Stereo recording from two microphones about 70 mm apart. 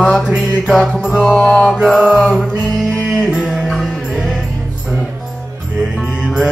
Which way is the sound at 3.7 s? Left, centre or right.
Centre.